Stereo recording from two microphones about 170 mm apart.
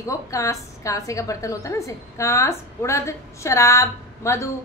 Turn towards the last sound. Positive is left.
turn(degrees=15)  # may be behind; listen again after turning